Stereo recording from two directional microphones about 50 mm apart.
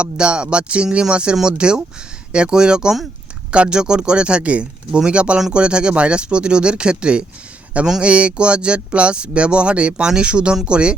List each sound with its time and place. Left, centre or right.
0.0 s speech: right